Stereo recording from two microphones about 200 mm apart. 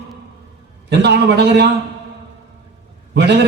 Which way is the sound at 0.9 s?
60° right (ahead or behind).